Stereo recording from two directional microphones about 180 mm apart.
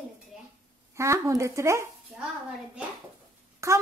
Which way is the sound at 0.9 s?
15° right (ahead or behind).